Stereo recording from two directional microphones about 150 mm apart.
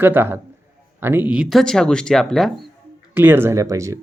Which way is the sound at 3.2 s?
15° right (ahead or behind).